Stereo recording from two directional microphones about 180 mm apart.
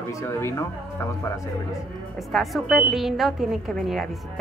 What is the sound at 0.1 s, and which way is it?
Speech, 15° left (ahead or behind).